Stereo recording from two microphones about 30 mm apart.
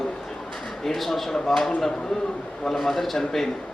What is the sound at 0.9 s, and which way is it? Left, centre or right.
A man's voice, centre.